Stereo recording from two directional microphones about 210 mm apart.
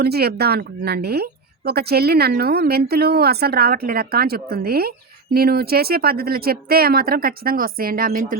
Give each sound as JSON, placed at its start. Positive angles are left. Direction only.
{"t": 0.0, "sound": "speech", "side_deg": -50}